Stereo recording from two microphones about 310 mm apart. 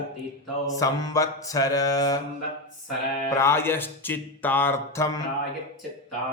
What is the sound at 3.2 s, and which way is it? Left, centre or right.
Speech, centre.